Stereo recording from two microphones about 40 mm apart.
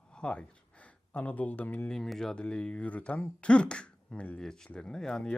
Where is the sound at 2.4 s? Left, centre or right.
Left.